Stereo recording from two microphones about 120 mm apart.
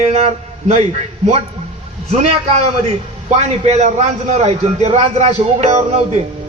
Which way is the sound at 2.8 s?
65° right (ahead or behind).